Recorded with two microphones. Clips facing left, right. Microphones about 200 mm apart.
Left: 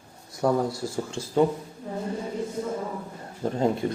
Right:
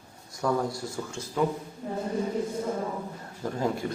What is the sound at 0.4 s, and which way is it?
Speech, 30° left (ahead or behind).